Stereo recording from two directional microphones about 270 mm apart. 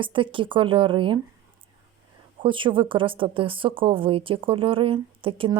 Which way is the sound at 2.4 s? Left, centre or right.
Centre.